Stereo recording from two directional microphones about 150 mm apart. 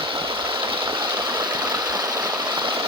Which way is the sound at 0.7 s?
35° right (ahead or behind).